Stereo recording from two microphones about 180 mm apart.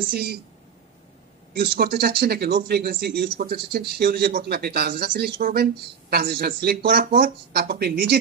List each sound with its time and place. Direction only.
0.1 s speech: 60° right (ahead or behind)
1.6 s speech: 60° right (ahead or behind)